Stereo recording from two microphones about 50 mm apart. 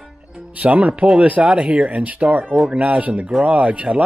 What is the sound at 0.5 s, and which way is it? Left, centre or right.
Speech, right.